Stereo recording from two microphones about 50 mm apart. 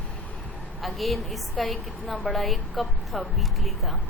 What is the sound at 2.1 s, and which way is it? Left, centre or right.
Speech, left.